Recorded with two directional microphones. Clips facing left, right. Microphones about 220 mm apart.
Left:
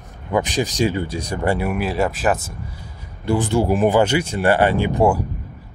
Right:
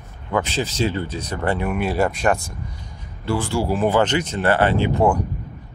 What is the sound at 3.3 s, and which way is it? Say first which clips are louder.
Speech: left 4 dB; 20° left (ahead or behind).